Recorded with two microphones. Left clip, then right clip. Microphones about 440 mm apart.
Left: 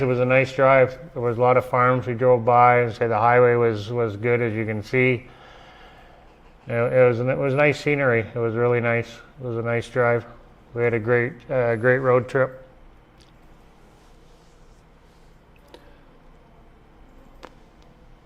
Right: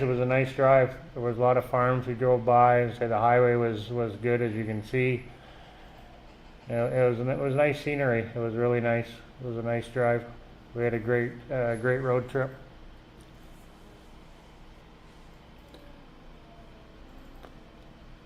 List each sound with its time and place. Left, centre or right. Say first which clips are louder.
0.0 s a man's voice: left 7 dB; left
6.7 s a man's voice: left 8 dB; left